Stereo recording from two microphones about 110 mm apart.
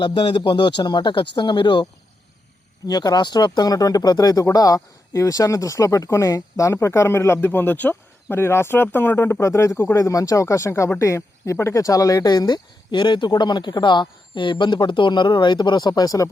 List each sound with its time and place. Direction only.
0.0 s speech: 45° left (ahead or behind)